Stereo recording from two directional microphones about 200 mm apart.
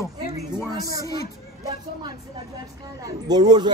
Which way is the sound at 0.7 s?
15° right (ahead or behind).